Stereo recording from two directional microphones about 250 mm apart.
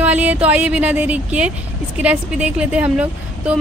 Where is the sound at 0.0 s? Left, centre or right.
Centre.